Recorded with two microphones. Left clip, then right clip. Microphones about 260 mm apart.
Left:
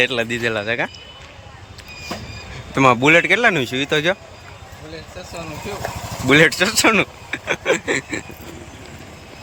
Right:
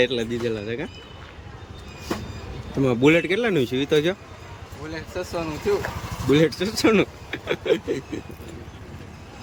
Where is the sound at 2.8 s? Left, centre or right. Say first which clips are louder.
Left 6 dB; centre.